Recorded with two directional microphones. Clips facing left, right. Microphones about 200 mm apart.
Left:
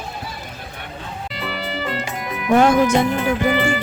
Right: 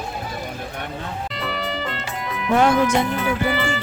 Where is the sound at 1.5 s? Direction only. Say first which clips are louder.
Left 3 dB; 10° left (ahead or behind).